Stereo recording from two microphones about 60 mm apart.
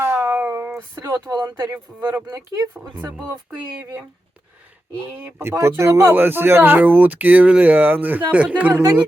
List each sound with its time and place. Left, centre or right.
0.0 s a sound: right
0.9 s speech: right
1.7 s speech: right
2.3 s speech: right
5.2 s speech: right
6.1 s speech: right